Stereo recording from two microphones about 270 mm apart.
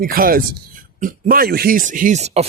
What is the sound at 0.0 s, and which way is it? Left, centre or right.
Speech, right.